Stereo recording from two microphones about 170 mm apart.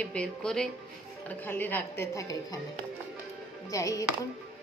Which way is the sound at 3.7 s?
20° left (ahead or behind).